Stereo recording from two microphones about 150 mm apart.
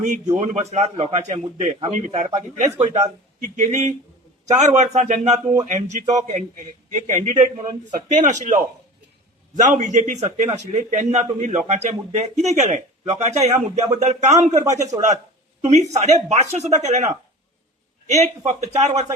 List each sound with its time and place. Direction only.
0.3 s a man's voice: 50° right (ahead or behind)
15.6 s a man's voice: 50° right (ahead or behind)